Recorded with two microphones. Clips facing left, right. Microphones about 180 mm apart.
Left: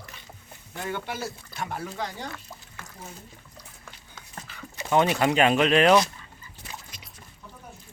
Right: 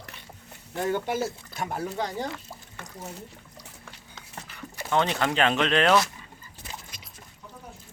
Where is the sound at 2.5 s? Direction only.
10° right (ahead or behind).